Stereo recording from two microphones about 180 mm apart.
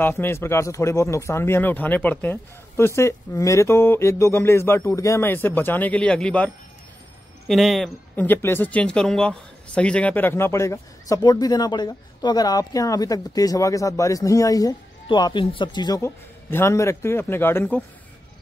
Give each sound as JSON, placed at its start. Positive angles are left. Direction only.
{"t": 0.0, "sound": "speech", "side_deg": 10}